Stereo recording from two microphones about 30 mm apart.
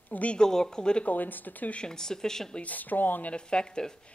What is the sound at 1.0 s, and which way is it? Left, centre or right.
Speech, left.